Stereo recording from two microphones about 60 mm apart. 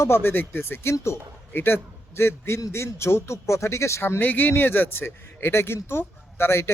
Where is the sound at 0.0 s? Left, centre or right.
Left.